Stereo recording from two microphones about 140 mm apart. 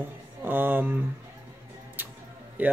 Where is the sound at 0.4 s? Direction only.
15° right (ahead or behind).